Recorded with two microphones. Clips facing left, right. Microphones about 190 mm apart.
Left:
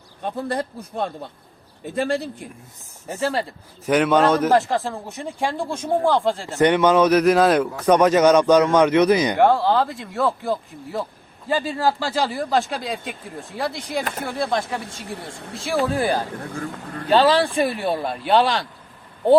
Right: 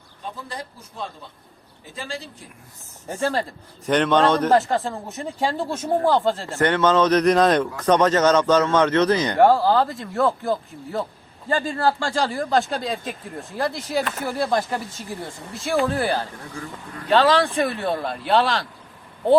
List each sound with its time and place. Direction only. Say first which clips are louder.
0.2 s speech: left 9 dB; 60° left (ahead or behind)
3.1 s speech: even; 5° left (ahead or behind)
6.6 s speech: left 3 dB; 15° left (ahead or behind)
9.4 s speech: right 1 dB; centre (ahead or behind)
16.0 s speech: left 2 dB; 15° left (ahead or behind)